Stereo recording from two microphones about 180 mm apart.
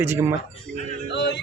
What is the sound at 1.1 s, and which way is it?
Music, 70° left (ahead or behind).